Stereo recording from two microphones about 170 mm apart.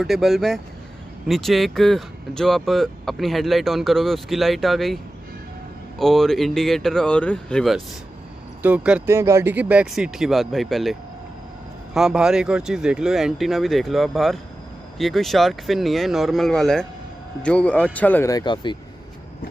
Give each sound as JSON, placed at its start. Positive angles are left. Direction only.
{"t": 0.0, "sound": "speech", "side_deg": 0}
{"t": 5.9, "sound": "speech", "side_deg": 0}
{"t": 8.6, "sound": "speech", "side_deg": -10}
{"t": 18.3, "sound": "speech", "side_deg": 25}